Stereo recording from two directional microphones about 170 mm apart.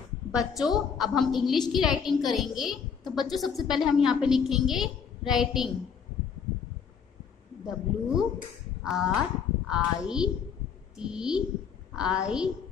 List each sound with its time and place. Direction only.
0.3 s a woman's voice: centre (ahead or behind)
7.6 s a woman's voice: 5° right (ahead or behind)